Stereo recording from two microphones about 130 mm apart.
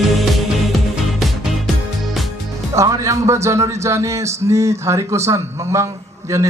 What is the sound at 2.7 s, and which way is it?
Speech, 25° right (ahead or behind).